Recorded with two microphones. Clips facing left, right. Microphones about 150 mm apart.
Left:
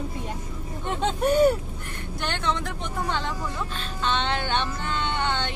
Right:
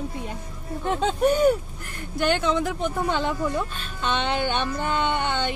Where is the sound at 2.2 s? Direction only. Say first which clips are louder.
Right 6 dB; 5° right (ahead or behind).